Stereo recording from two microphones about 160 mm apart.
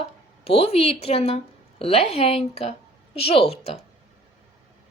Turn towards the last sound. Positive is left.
turn(degrees=40)  # may be behind; listen again after turning